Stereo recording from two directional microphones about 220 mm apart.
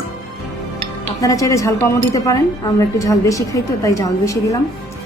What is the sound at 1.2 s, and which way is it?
Speech, 15° left (ahead or behind).